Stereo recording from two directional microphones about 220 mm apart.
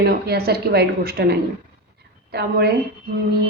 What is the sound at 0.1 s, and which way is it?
A woman's voice, 45° right (ahead or behind).